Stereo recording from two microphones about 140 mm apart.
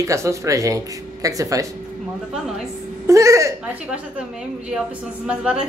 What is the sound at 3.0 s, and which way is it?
Speech, 20° right (ahead or behind).